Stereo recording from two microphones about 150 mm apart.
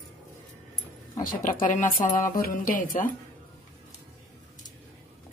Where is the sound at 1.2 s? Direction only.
60° left (ahead or behind).